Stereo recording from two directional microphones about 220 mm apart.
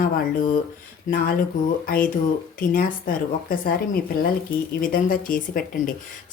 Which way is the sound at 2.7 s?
40° left (ahead or behind).